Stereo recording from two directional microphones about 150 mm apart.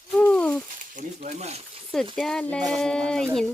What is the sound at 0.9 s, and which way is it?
Speech, 55° right (ahead or behind).